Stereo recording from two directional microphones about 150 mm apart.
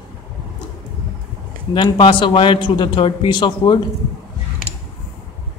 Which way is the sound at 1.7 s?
30° left (ahead or behind).